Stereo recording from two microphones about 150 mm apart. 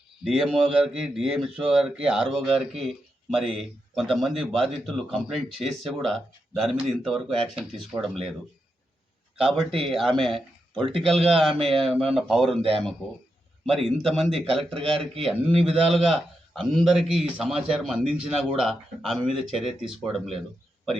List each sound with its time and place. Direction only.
0.3 s speech: centre (ahead or behind)
9.4 s speech: centre (ahead or behind)
13.7 s speech: centre (ahead or behind)
14.8 s a man's voice: 40° right (ahead or behind)
15.2 s speech: centre (ahead or behind)